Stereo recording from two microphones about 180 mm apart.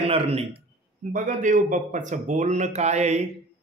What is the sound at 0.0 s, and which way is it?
Speech, 35° right (ahead or behind).